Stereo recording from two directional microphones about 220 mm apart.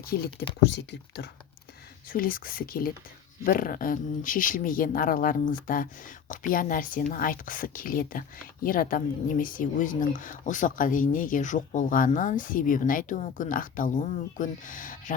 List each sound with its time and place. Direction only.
0.0 s speech: 45° left (ahead or behind)
2.0 s speech: 40° left (ahead or behind)